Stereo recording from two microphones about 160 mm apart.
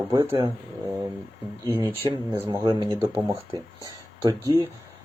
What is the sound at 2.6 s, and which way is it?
Speech, 30° right (ahead or behind).